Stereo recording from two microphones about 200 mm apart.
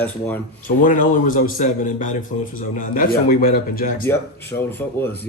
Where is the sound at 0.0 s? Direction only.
10° left (ahead or behind).